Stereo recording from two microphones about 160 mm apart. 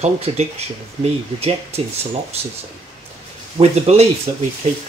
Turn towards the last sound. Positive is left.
turn(degrees=-40)  # may be behind; listen again after turning